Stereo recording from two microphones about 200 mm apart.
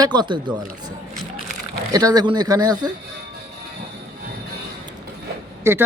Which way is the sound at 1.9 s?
20° right (ahead or behind).